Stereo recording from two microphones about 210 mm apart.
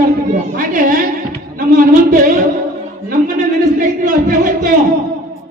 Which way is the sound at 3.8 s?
40° right (ahead or behind).